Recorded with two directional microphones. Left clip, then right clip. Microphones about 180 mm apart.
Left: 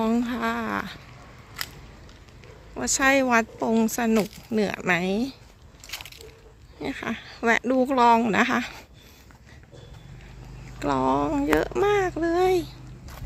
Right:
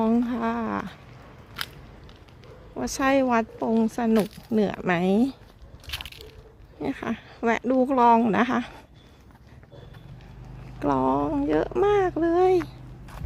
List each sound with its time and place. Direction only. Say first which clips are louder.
0.0 s a sound: right 1 dB; 15° right (ahead or behind)
1.6 s biting: right 1 dB; 10° left (ahead or behind)
2.7 s speech: left 2 dB; 15° right (ahead or behind)
5.9 s biting: right 2 dB; 10° left (ahead or behind)
6.7 s speech: even; 15° right (ahead or behind)
10.8 s speech: even; 10° right (ahead or behind)